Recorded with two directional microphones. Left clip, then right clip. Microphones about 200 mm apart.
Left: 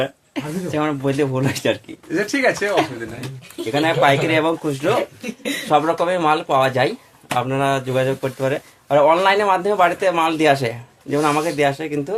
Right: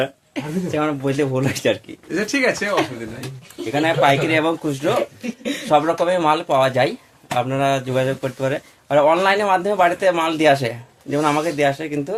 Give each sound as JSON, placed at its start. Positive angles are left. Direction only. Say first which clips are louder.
{"t": 0.0, "sound": "speech", "louder": "even", "side_deg": 10}
{"t": 2.1, "sound": "speech", "louder": "left 1 dB", "side_deg": -20}
{"t": 3.7, "sound": "speech", "louder": "even", "side_deg": 15}
{"t": 5.2, "sound": "speech", "louder": "even", "side_deg": 40}
{"t": 5.6, "sound": "speech", "louder": "right 1 dB", "side_deg": 10}